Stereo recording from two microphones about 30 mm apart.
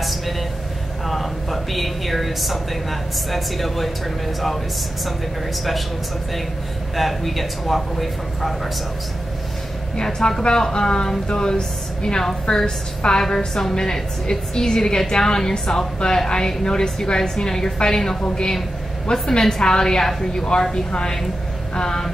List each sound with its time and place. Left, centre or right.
1.0 s a woman's voice: centre
7.0 s a man's voice: centre
10.0 s a woman's voice: centre